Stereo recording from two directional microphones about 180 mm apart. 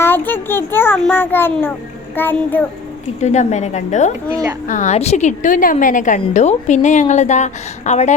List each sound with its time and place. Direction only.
0.0 s a child's voice: 10° left (ahead or behind)
3.2 s a woman's voice: 40° left (ahead or behind)